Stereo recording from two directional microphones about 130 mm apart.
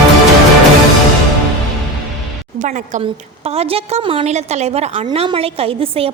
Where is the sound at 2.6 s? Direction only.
70° right (ahead or behind).